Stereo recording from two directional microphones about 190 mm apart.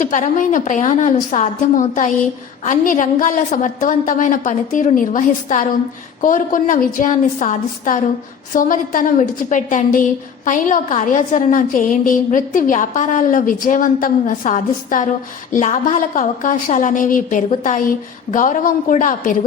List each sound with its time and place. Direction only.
0.0 s a woman's voice: 40° left (ahead or behind)